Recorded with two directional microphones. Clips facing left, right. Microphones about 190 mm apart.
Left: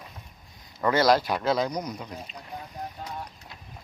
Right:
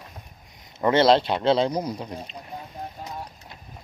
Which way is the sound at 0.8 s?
25° right (ahead or behind).